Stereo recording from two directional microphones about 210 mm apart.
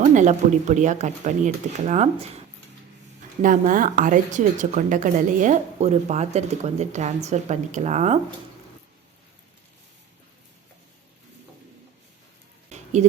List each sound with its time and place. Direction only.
0.0 s a woman's voice: 35° right (ahead or behind)
3.4 s a woman's voice: 40° right (ahead or behind)
12.7 s a sound: 35° right (ahead or behind)